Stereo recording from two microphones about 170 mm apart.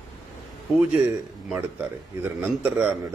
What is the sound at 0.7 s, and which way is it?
A man's voice, 10° right (ahead or behind).